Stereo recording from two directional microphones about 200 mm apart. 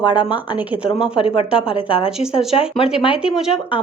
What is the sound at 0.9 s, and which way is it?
Speech, 5° right (ahead or behind).